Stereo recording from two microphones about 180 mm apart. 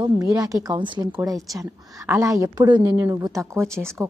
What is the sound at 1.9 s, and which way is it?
A woman's voice, 15° right (ahead or behind).